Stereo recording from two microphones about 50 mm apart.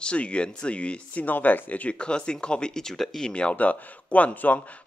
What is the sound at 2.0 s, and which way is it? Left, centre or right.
Speech, centre.